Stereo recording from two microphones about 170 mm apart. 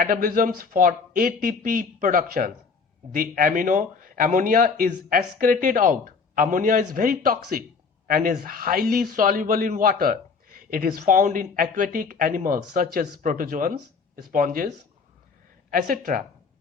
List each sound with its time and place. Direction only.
0.0 s a man's voice: 55° right (ahead or behind)
15.7 s a man's voice: 55° right (ahead or behind)